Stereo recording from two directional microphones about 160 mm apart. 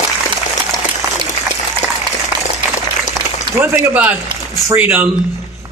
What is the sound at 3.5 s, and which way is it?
Speech, 15° right (ahead or behind).